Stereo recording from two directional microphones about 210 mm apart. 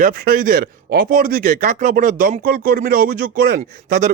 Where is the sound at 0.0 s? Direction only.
45° right (ahead or behind).